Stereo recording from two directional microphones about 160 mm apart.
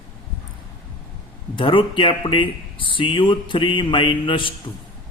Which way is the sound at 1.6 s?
30° left (ahead or behind).